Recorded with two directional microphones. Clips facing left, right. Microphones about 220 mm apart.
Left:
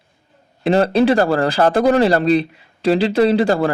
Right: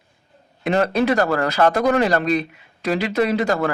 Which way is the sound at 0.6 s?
30° left (ahead or behind).